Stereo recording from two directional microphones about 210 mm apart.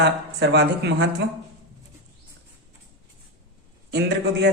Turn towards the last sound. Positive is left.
turn(degrees=-50)  # may be behind; listen again after turning